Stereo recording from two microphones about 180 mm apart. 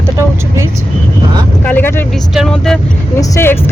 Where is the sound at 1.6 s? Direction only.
10° left (ahead or behind).